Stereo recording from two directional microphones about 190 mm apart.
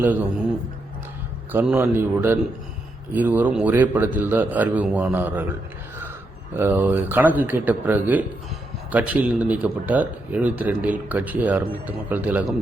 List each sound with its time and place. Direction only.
1.5 s a man's voice: 10° right (ahead or behind)